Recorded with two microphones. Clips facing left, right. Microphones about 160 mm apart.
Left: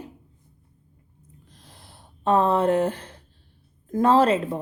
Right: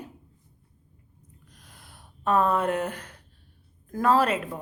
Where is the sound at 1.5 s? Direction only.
30° left (ahead or behind).